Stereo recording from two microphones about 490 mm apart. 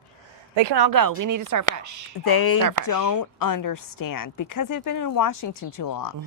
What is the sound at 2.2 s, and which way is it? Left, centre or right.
Speech, left.